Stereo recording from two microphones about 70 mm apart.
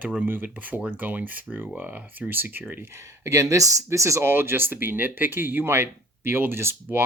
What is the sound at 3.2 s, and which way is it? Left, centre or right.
Speech, right.